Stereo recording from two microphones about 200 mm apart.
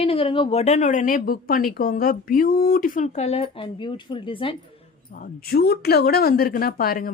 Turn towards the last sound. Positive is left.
turn(degrees=45)  # may be behind; listen again after turning